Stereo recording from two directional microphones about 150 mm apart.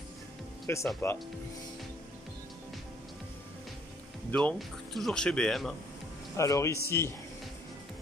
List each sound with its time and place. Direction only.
0.7 s speech: 15° left (ahead or behind)
4.3 s speech: 5° left (ahead or behind)
6.3 s speech: 20° left (ahead or behind)